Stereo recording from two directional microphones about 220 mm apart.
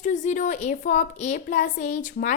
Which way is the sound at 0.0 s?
35° left (ahead or behind).